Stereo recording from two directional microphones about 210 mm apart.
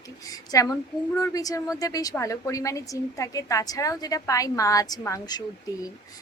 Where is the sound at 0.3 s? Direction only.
15° left (ahead or behind).